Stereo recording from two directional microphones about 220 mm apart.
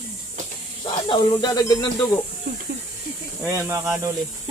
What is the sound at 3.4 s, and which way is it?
Speech, 15° right (ahead or behind).